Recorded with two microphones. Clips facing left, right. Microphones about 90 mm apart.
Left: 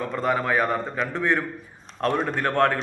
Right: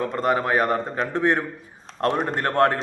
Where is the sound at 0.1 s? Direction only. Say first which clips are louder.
Left 1 dB; 20° right (ahead or behind).